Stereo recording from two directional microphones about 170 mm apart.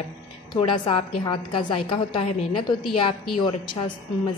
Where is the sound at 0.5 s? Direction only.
25° left (ahead or behind).